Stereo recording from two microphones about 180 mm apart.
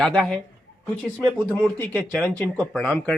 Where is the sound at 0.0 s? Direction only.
5° left (ahead or behind).